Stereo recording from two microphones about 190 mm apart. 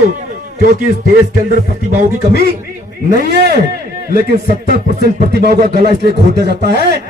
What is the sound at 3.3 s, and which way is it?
Speech, 60° right (ahead or behind).